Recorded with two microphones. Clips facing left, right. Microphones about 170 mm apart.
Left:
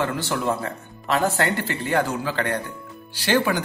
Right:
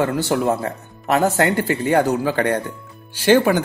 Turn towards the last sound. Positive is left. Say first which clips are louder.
# right 7 dB
turn(degrees=-50)  # may be behind; listen again after turning